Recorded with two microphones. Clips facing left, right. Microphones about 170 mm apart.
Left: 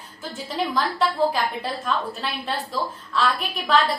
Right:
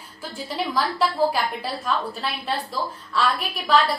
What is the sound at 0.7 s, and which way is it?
A woman's voice, centre (ahead or behind).